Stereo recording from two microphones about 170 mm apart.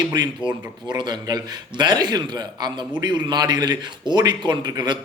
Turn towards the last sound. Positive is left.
turn(degrees=-25)  # may be behind; listen again after turning